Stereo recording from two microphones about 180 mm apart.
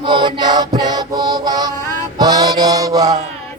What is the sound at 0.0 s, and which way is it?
Chant, 25° right (ahead or behind).